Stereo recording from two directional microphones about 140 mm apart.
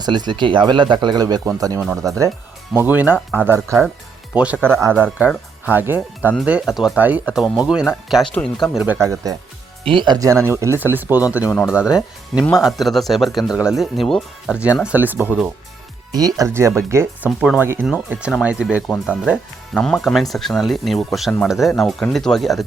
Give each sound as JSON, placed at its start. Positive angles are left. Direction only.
{"t": 0.0, "sound": "speech", "side_deg": -30}
{"t": 2.7, "sound": "speech", "side_deg": -10}
{"t": 8.1, "sound": "speech", "side_deg": 5}
{"t": 9.0, "sound": "speech", "side_deg": -25}
{"t": 14.8, "sound": "speech", "side_deg": -10}
{"t": 16.1, "sound": "speech", "side_deg": -25}
{"t": 17.2, "sound": "speech", "side_deg": -5}
{"t": 19.7, "sound": "speech", "side_deg": 5}